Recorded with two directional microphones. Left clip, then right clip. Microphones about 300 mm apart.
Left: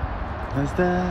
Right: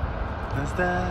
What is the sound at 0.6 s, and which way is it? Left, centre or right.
Speech, centre.